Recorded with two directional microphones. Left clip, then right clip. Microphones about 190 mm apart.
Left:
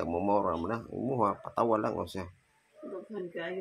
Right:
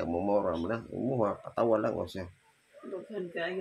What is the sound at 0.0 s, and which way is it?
Speech, 15° left (ahead or behind).